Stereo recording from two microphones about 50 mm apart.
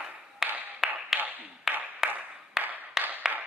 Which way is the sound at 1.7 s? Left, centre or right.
Centre.